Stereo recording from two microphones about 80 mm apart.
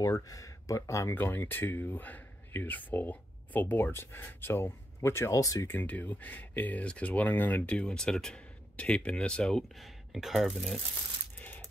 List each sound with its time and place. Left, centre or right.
0.0 s speech: left
1.1 s speech: left
5.7 s speech: left; by 10.8 s centre